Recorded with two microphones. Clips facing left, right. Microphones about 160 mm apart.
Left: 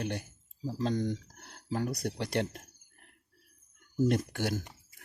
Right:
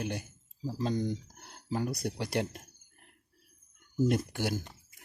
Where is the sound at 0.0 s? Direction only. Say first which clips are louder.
Even; 10° right (ahead or behind).